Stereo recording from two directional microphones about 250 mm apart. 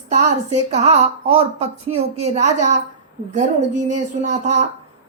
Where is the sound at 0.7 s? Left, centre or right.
Right.